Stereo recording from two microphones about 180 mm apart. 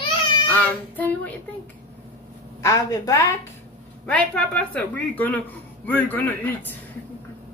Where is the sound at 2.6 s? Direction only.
20° left (ahead or behind).